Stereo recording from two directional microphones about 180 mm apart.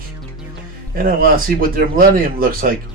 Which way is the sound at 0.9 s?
50° right (ahead or behind).